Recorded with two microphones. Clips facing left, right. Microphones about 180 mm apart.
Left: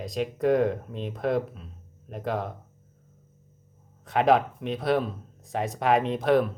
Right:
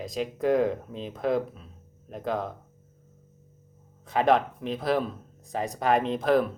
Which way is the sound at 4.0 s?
Centre (ahead or behind).